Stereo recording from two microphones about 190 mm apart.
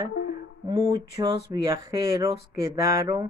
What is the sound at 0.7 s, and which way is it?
Speech, 20° right (ahead or behind).